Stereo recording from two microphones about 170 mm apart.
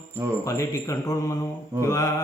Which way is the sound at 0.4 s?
20° left (ahead or behind).